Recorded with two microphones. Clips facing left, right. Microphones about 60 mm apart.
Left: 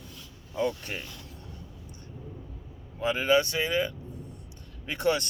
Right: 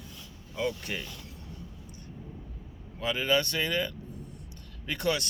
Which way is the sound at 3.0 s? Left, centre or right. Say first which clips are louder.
Left 3 dB; left.